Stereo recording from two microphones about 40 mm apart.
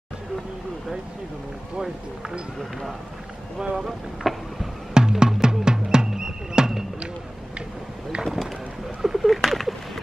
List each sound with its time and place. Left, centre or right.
1.8 s speech: centre
3.8 s vehicle: centre
4.9 s music: centre
8.2 s boat: centre
9.0 s a sound: centre